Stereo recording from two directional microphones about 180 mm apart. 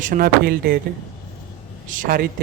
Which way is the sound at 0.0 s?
50° right (ahead or behind).